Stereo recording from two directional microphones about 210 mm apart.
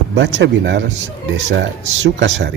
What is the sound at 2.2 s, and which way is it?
Speech, 60° right (ahead or behind).